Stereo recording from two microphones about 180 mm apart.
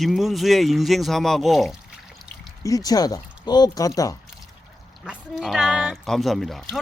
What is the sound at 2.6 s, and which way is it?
Speech, 20° left (ahead or behind).